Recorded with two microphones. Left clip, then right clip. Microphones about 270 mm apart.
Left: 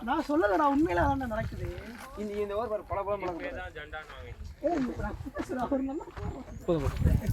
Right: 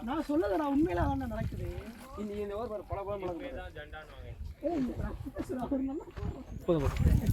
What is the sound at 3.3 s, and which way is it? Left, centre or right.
Speech, centre.